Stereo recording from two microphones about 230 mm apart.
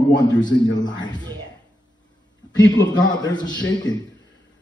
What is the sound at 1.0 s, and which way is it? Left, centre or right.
Speech, centre.